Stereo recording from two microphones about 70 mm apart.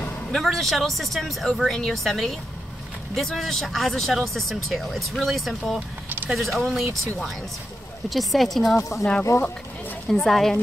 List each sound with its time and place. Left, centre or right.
0.3 s speech: centre
8.1 s speech: centre
8.7 s speech: left
10.0 s speech: centre